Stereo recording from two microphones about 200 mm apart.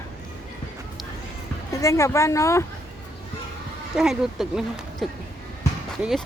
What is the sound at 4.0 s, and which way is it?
Speech, 5° right (ahead or behind).